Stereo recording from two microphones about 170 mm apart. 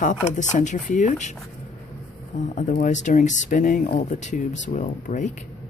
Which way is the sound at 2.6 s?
50° left (ahead or behind).